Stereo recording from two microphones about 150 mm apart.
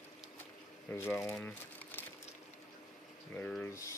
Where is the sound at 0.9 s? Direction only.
10° left (ahead or behind).